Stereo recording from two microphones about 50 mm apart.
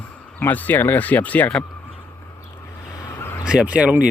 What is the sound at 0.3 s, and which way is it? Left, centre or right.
Speech, left.